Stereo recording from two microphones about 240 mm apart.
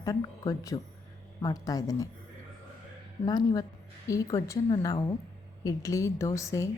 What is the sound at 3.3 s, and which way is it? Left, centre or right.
Speech, centre.